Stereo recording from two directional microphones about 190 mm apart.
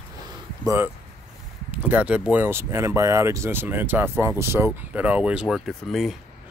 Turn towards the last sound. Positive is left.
turn(degrees=0)  # may be behind; listen again after turning